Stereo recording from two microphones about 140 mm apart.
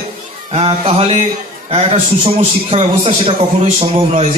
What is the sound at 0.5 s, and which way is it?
A man's voice, 45° right (ahead or behind).